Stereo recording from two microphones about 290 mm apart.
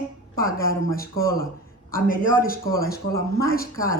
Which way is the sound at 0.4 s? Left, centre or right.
Left.